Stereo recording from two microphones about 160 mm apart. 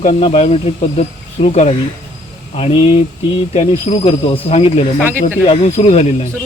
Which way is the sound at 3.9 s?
35° left (ahead or behind).